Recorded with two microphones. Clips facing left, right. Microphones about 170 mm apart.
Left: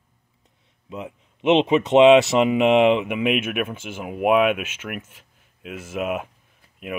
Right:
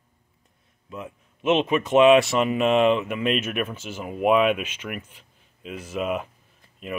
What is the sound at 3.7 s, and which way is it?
Speech, 55° left (ahead or behind).